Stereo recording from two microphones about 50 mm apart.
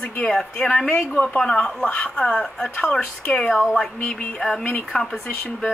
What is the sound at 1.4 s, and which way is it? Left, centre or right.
Speech, centre.